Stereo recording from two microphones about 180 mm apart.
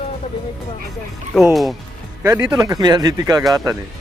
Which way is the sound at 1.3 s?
Centre (ahead or behind).